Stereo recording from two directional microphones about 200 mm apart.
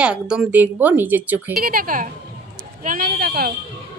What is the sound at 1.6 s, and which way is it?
Speech, 45° right (ahead or behind).